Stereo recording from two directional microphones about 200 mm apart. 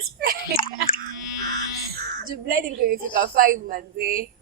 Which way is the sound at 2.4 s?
45° right (ahead or behind).